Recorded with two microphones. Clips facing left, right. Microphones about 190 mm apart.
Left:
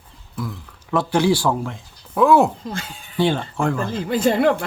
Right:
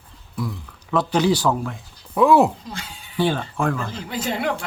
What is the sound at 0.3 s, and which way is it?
Speech, centre (ahead or behind).